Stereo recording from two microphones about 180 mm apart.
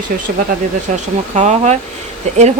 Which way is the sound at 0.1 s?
50° right (ahead or behind).